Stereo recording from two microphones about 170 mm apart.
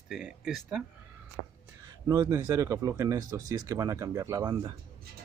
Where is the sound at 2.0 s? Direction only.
20° right (ahead or behind).